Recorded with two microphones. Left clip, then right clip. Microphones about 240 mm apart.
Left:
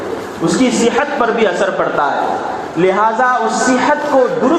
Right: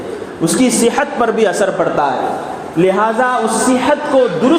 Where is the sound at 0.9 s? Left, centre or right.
Right.